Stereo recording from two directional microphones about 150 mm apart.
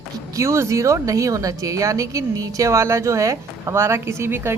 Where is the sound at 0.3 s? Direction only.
20° right (ahead or behind).